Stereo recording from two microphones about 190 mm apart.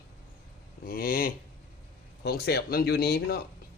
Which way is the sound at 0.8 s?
50° left (ahead or behind).